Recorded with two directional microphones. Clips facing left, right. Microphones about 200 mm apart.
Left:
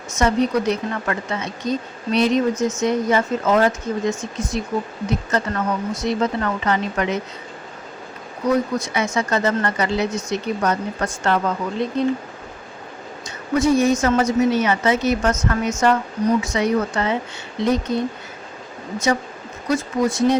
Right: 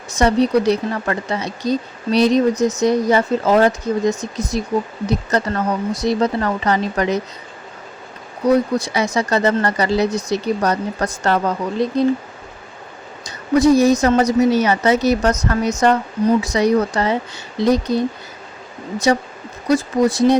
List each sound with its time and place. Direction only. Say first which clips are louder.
0.1 s speech: right 4 dB; 35° right (ahead or behind)
8.4 s speech: right 4 dB; 35° right (ahead or behind)
13.2 s speech: right 5 dB; 35° right (ahead or behind)
19.1 s speech: right 4 dB; 35° right (ahead or behind)